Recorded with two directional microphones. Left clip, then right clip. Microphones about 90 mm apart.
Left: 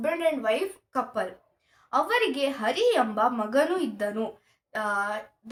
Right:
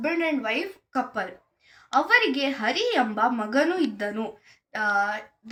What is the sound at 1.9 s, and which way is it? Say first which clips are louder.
Speech: right 4 dB; 40° left (ahead or behind).